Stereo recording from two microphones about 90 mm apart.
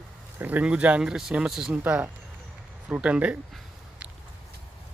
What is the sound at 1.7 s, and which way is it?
Speech, 15° right (ahead or behind).